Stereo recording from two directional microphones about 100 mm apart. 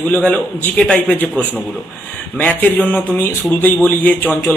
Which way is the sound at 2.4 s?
15° left (ahead or behind).